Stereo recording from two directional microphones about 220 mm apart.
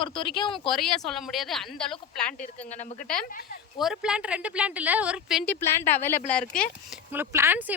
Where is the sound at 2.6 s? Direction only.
30° left (ahead or behind).